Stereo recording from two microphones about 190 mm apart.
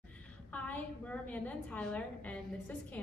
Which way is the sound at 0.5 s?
5° left (ahead or behind).